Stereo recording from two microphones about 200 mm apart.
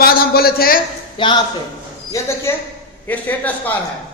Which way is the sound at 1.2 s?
25° left (ahead or behind).